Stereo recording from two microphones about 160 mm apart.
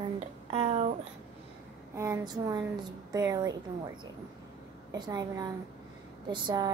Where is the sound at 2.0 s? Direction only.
25° right (ahead or behind).